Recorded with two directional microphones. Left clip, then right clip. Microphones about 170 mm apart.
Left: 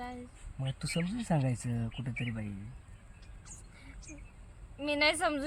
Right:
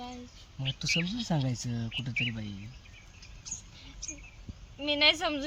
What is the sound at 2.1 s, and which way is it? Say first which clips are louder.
Speech: right 9 dB; 65° left (ahead or behind).